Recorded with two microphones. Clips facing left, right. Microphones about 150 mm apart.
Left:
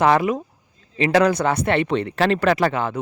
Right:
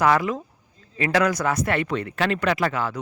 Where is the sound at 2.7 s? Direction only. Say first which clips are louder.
Left 3 dB; 25° left (ahead or behind).